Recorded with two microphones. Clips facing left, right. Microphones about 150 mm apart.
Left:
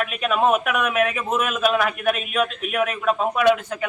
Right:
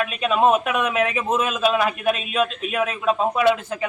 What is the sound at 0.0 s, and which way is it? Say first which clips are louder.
A man's voice: right 2 dB; 20° right (ahead or behind).